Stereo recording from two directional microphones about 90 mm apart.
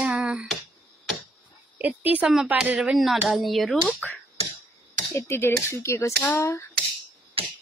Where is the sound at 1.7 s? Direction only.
20° right (ahead or behind).